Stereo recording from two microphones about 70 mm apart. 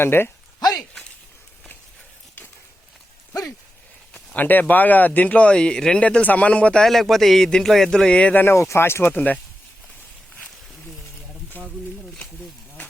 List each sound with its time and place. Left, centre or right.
0.0 s speech: left
4.4 s speech: left
6.8 s a man's voice: centre
8.4 s speech: left
9.1 s speech: left